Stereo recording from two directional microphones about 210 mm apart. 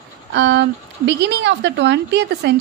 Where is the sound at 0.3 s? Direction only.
60° right (ahead or behind).